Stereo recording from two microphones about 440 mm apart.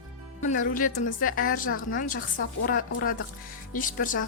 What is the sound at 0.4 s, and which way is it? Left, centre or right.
A woman's voice, centre.